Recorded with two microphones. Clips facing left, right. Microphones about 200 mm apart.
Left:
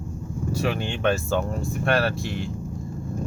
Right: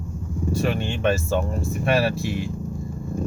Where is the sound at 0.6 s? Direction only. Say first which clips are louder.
Right 1 dB; centre (ahead or behind).